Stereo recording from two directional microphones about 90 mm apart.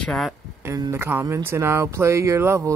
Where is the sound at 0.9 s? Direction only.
25° right (ahead or behind).